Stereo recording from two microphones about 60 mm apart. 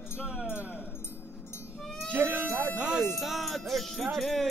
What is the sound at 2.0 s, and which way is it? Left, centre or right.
Speech, right.